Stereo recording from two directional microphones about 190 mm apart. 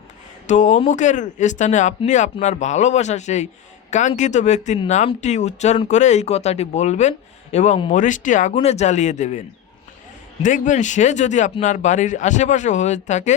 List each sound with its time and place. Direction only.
0.4 s speech: 40° left (ahead or behind)
10.4 s speech: 40° left (ahead or behind)